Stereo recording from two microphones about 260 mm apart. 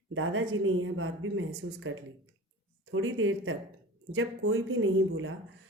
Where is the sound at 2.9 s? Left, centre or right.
Right.